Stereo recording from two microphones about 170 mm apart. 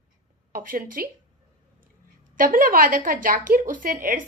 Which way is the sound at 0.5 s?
55° right (ahead or behind).